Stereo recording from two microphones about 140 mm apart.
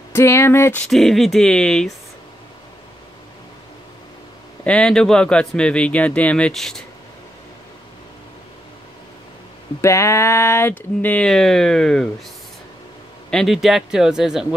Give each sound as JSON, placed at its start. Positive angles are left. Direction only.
{"t": 0.1, "sound": "speech", "side_deg": 20}
{"t": 0.8, "sound": "speech", "side_deg": 0}
{"t": 4.6, "sound": "speech", "side_deg": 5}
{"t": 9.8, "sound": "speech", "side_deg": 20}
{"t": 13.3, "sound": "speech", "side_deg": 0}